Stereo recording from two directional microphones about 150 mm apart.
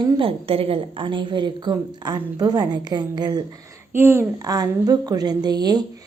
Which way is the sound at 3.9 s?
15° right (ahead or behind).